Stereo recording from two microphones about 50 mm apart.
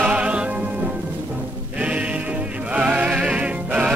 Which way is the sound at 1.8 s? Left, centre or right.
Right.